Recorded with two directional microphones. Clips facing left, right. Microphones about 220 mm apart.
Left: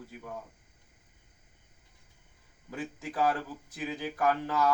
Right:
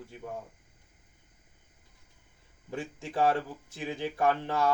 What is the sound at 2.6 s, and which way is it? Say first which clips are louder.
Speech: right 1 dB; 25° right (ahead or behind).